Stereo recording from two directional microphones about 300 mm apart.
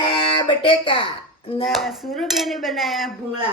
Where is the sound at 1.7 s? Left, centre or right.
Centre.